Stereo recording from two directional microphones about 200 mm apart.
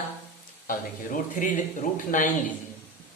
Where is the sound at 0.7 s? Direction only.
40° left (ahead or behind).